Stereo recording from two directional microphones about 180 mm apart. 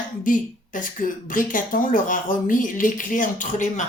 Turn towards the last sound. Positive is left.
turn(degrees=45)  # may be behind; listen again after turning